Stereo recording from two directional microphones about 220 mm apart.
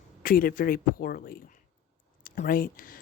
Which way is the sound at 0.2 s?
40° left (ahead or behind).